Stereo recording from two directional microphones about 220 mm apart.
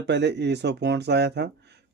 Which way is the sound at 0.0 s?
50° right (ahead or behind).